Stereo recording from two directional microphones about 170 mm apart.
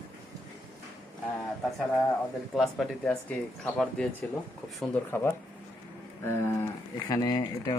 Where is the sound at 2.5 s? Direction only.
Centre (ahead or behind).